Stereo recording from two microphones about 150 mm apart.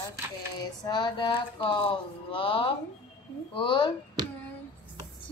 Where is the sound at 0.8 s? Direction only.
30° left (ahead or behind).